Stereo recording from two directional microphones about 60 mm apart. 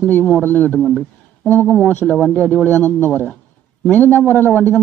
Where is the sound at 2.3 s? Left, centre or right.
Left.